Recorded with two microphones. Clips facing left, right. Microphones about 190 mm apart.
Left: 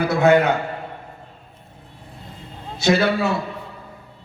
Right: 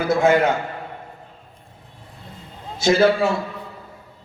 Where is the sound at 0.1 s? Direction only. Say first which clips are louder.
Even; 65° left (ahead or behind).